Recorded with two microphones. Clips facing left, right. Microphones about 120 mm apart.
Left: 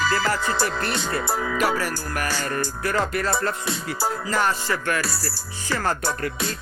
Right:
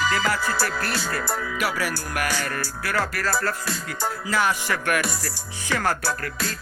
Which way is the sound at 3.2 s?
Centre (ahead or behind).